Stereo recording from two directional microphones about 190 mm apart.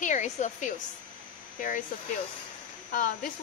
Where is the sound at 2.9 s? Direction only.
45° left (ahead or behind).